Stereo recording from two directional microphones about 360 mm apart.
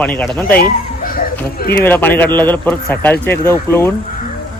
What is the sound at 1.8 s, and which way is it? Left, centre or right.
Speech, centre.